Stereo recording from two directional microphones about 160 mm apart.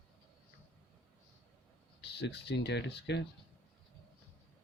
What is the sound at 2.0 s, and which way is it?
Speech, 90° left.